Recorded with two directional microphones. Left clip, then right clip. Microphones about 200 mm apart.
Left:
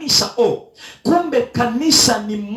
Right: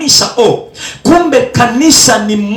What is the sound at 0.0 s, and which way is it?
Speech, 30° right (ahead or behind).